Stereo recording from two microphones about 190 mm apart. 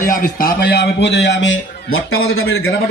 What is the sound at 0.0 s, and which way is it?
A man's voice, 45° left (ahead or behind).